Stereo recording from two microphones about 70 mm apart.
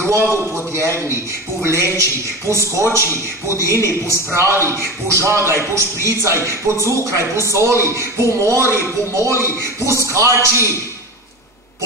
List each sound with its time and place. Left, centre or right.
0.0 s a man's voice: right